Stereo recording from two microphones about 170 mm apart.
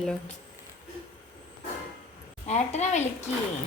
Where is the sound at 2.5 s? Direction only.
40° left (ahead or behind).